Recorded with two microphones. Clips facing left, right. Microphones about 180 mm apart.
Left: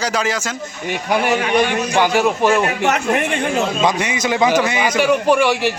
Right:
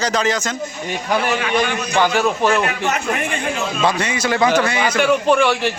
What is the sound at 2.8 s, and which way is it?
Speech, 65° left (ahead or behind).